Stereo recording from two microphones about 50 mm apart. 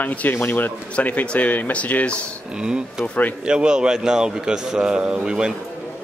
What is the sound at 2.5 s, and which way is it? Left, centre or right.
Speech, centre.